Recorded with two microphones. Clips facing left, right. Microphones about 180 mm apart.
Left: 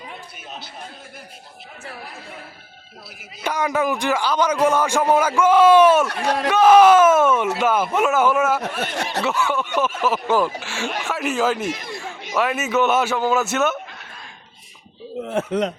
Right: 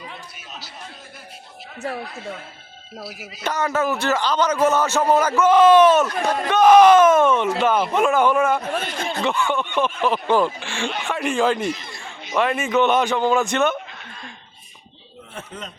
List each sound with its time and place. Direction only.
3.4 s a man's voice: 10° left (ahead or behind)
8.6 s speech: 75° left (ahead or behind)
9.2 s speech: 5° left (ahead or behind)
11.9 s a sound: 5° left (ahead or behind)
12.3 s speech: 5° left (ahead or behind)
15.2 s speech: 85° left